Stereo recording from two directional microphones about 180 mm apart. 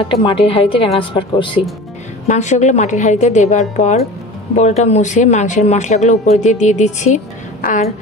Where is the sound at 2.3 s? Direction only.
40° left (ahead or behind).